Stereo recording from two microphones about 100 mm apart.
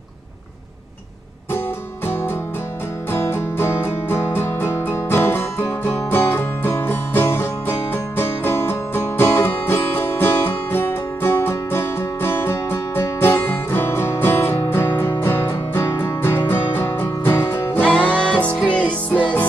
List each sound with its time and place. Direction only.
3.1 s music: 25° left (ahead or behind)
17.8 s music: 10° left (ahead or behind)